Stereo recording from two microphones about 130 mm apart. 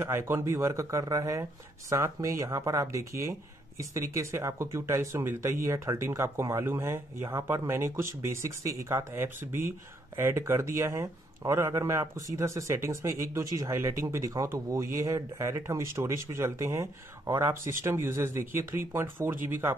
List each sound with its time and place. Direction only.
0.0 s speech: 20° right (ahead or behind)